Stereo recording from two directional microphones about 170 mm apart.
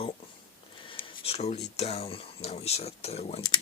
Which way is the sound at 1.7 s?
40° left (ahead or behind).